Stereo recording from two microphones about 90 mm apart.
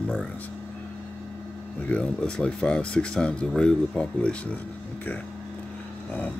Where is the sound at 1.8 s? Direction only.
10° left (ahead or behind).